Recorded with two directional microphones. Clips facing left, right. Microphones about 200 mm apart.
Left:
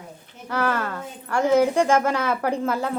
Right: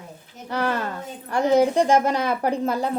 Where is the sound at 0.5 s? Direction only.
20° right (ahead or behind).